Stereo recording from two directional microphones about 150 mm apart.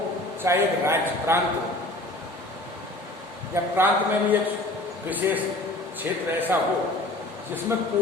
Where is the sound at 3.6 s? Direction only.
20° right (ahead or behind).